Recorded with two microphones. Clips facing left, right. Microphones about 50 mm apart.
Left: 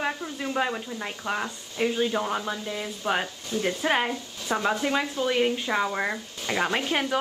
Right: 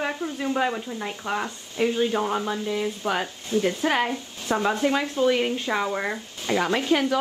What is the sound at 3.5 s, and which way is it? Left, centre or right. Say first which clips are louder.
Speech: right 2 dB; right.